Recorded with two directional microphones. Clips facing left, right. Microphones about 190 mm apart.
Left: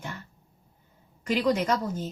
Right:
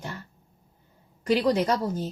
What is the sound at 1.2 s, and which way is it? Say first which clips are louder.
Speech: right 2 dB; 35° right (ahead or behind).